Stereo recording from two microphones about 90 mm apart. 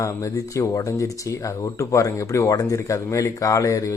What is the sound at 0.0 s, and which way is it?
Speech, 35° left (ahead or behind).